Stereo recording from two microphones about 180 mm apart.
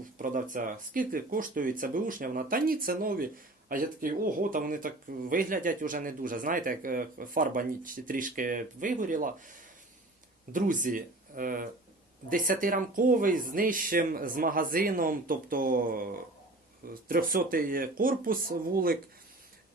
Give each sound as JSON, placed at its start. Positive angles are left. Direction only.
{"t": 0.2, "sound": "speech", "side_deg": -45}
{"t": 10.5, "sound": "speech", "side_deg": -45}